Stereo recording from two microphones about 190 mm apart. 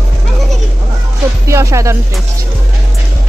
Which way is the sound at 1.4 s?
15° right (ahead or behind).